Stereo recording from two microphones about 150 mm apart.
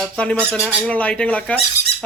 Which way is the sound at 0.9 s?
10° left (ahead or behind).